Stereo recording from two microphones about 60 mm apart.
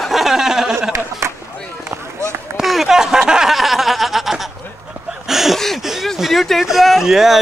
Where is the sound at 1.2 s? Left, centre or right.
Right.